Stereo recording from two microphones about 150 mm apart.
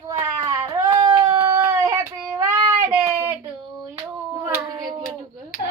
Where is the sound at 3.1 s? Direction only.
25° right (ahead or behind).